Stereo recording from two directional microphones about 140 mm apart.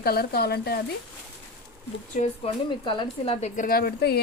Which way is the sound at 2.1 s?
55° left (ahead or behind).